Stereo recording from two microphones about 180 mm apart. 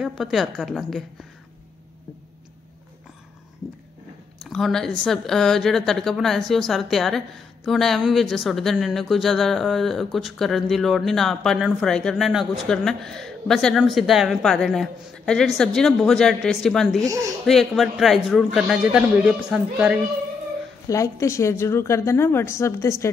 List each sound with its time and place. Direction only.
0.0 s speech: centre (ahead or behind)
4.4 s speech: centre (ahead or behind)
17.0 s speech: 20° right (ahead or behind)
17.5 s speech: centre (ahead or behind)
20.9 s a woman's voice: 15° left (ahead or behind)